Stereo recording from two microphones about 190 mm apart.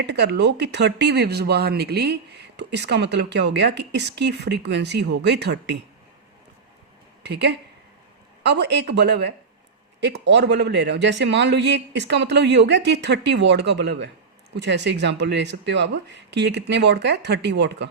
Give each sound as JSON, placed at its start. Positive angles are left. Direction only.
{"t": 0.0, "sound": "speech", "side_deg": -65}
{"t": 7.2, "sound": "speech", "side_deg": -60}